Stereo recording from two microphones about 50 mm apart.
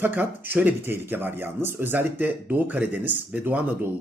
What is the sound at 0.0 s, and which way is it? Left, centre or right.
Speech, right.